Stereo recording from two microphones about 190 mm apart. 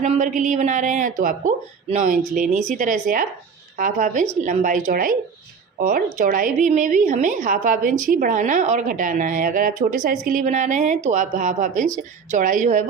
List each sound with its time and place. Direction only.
0.0 s a woman's voice: 40° right (ahead or behind)